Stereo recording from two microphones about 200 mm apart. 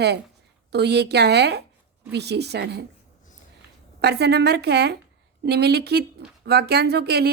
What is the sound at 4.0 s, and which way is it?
A woman's voice, 55° right (ahead or behind).